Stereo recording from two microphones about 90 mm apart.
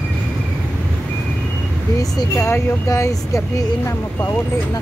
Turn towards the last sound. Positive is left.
turn(degrees=35)  # may be behind; listen again after turning